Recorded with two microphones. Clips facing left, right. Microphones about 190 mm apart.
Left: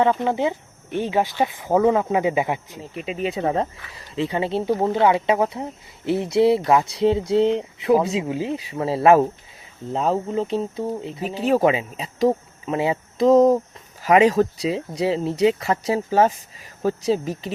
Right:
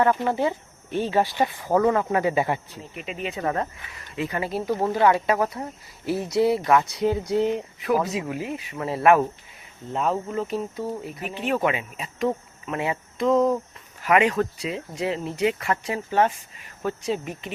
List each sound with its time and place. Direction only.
0.0 s speech: 20° left (ahead or behind)
3.4 s speech: 25° left (ahead or behind)